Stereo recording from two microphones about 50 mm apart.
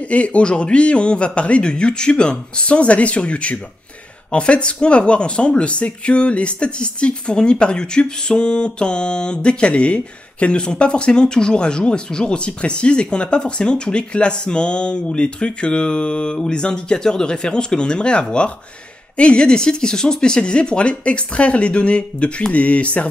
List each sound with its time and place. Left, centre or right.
0.1 s speech: left